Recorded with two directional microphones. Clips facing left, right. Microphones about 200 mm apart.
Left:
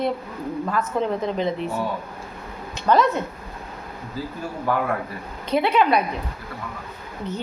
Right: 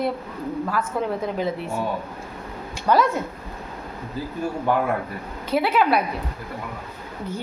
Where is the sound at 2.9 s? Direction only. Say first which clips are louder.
Left 1 dB; 10° right (ahead or behind).